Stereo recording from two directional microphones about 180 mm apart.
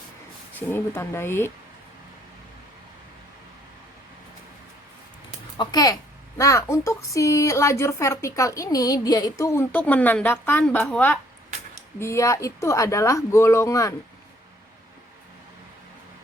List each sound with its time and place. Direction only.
0.7 s a child's voice: 10° left (ahead or behind)
5.5 s a child's voice: 20° left (ahead or behind)